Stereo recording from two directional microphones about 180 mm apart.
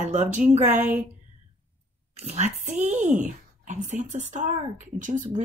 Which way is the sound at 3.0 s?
45° right (ahead or behind).